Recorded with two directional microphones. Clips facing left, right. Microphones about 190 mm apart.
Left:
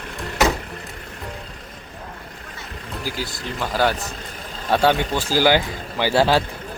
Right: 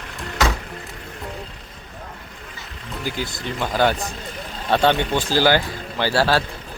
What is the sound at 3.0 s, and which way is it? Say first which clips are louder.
A man's voice: right 2 dB; 5° left (ahead or behind).